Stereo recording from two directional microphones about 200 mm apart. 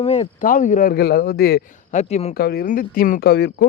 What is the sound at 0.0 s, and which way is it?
Speech, 30° left (ahead or behind).